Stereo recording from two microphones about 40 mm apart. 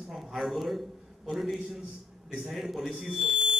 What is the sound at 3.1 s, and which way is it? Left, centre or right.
Smoke detector, centre.